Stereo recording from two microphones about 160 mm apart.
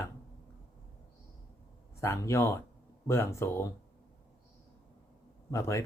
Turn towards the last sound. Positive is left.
turn(degrees=20)  # may be behind; listen again after turning